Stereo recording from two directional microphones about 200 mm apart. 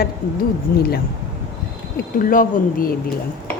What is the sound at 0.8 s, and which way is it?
Speech, 50° left (ahead or behind).